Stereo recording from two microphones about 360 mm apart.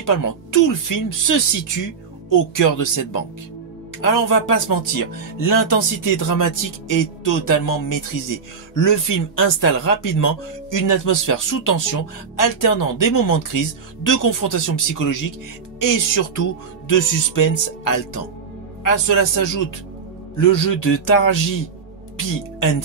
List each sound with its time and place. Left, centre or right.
0.0 s speech: left